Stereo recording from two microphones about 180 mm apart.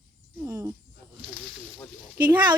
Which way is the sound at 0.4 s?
15° right (ahead or behind).